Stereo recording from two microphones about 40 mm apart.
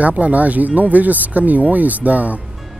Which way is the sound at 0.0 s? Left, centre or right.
Right.